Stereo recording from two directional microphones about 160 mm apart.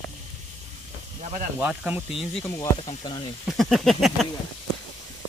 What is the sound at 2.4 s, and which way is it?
Speech, 15° left (ahead or behind).